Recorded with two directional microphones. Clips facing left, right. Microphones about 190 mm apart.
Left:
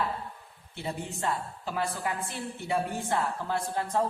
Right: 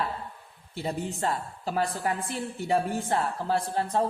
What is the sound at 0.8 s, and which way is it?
Speech, 35° right (ahead or behind).